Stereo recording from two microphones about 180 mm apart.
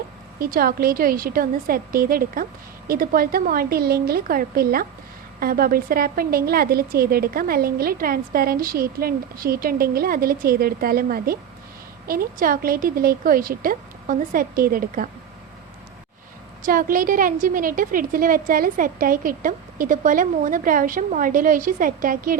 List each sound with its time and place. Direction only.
0.3 s a woman's voice: 55° right (ahead or behind)
16.6 s a woman's voice: 50° right (ahead or behind)